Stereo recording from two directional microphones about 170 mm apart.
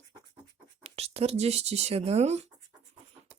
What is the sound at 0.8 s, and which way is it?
Speech, 35° right (ahead or behind).